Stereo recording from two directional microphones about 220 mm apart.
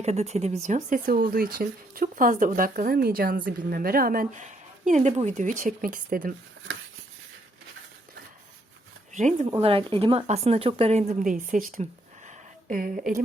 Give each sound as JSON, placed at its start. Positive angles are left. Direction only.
{"t": 0.0, "sound": "speech", "side_deg": -30}
{"t": 9.1, "sound": "speech", "side_deg": -35}